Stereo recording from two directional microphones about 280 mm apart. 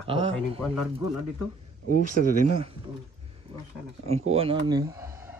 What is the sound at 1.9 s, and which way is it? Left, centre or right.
Speech, right.